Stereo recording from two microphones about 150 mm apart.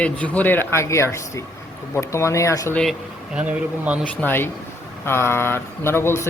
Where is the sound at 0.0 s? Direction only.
10° left (ahead or behind).